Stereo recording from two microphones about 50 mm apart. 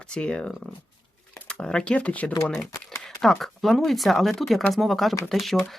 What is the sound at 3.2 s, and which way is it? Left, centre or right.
Speech, centre.